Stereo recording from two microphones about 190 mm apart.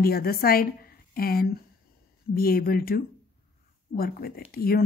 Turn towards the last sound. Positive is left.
turn(degrees=55)  # may be behind; listen again after turning